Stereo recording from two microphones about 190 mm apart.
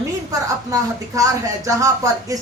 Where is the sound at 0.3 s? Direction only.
15° right (ahead or behind).